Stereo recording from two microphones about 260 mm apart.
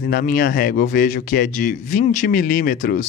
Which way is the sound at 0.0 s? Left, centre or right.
Left.